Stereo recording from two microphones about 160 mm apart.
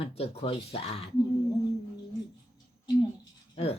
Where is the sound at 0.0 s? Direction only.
35° left (ahead or behind).